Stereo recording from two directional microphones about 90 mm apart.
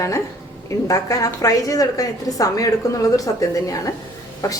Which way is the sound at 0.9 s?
35° left (ahead or behind).